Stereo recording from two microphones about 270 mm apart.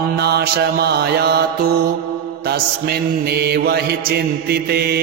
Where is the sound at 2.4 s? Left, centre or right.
Right.